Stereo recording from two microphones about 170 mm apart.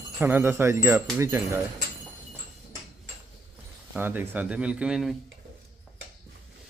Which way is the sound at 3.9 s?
10° right (ahead or behind).